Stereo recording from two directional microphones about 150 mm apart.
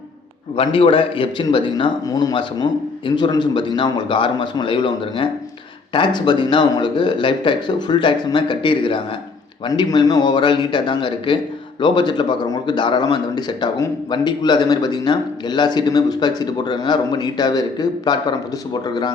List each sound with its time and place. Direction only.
0.5 s a man's voice: 35° left (ahead or behind)